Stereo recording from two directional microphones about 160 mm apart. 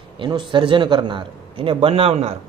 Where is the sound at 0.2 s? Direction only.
30° right (ahead or behind).